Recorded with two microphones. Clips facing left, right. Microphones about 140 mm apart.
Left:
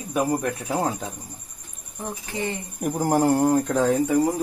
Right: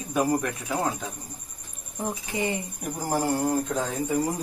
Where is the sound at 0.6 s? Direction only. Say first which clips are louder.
Left 3 dB; 30° left (ahead or behind).